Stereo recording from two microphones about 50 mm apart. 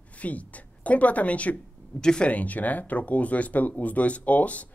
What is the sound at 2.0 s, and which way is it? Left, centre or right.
Speech, centre.